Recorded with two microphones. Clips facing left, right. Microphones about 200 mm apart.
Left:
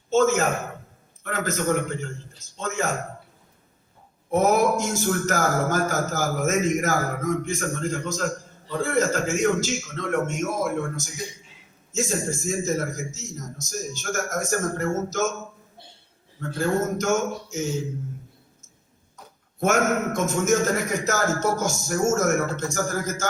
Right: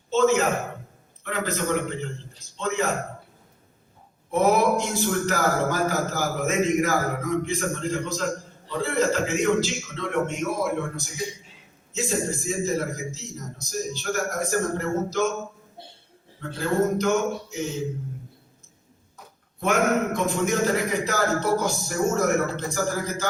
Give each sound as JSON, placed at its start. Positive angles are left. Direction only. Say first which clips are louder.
{"t": 0.1, "sound": "a sound", "louder": "even", "side_deg": 45}
{"t": 1.2, "sound": "a man's voice", "louder": "left 1 dB", "side_deg": 45}
{"t": 4.3, "sound": "a man's voice", "louder": "even", "side_deg": 45}
{"t": 16.6, "sound": "a man's voice", "louder": "right 1 dB", "side_deg": 45}
{"t": 19.5, "sound": "a man's voice", "louder": "even", "side_deg": 45}